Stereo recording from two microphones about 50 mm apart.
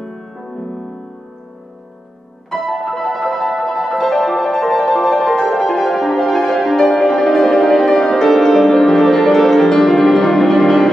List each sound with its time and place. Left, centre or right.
2.5 s music: centre